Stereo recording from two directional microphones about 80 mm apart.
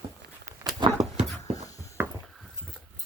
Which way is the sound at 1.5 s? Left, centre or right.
Left.